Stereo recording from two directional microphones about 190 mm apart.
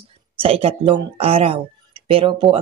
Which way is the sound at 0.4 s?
30° right (ahead or behind).